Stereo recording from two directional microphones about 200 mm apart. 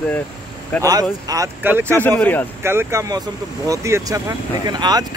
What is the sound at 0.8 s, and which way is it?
Speech, 15° right (ahead or behind).